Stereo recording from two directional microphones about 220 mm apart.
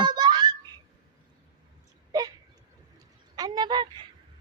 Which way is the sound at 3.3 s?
20° right (ahead or behind).